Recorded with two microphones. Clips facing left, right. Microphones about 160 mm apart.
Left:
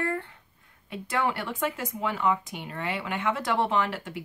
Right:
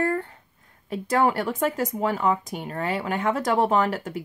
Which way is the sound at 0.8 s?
40° right (ahead or behind).